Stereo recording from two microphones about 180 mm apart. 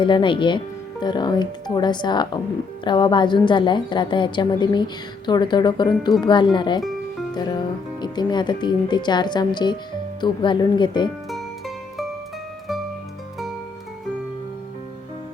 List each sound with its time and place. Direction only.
0.0 s a woman's voice: 25° left (ahead or behind)
8.0 s a woman's voice: 25° left (ahead or behind)
11.3 s music: centre (ahead or behind)